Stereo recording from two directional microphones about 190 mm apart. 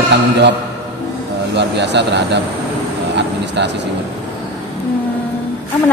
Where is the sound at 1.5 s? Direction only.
65° right (ahead or behind).